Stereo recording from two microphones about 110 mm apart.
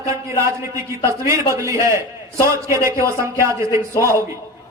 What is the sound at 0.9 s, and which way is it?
A man's voice, 25° right (ahead or behind).